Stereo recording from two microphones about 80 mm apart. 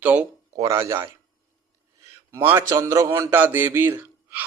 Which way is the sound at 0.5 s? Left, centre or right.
Right.